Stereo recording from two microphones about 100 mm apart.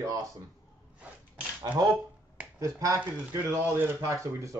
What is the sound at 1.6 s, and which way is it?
Speech, 45° right (ahead or behind).